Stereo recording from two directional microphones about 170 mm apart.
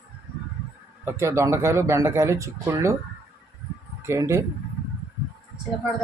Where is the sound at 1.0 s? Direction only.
15° right (ahead or behind).